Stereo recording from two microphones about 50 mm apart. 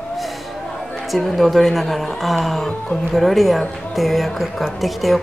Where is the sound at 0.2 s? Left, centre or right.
Centre.